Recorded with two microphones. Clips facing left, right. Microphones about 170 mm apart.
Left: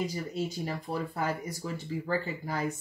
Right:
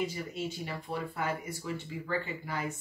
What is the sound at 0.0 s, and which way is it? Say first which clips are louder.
Speech: left 2 dB; 40° left (ahead or behind).